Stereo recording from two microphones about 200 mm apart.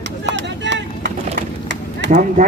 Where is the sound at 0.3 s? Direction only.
65° right (ahead or behind).